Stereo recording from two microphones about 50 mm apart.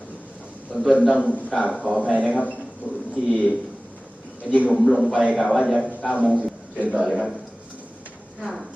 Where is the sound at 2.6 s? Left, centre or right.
Centre.